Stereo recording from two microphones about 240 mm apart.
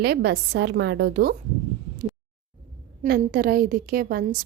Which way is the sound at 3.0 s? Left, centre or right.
Right.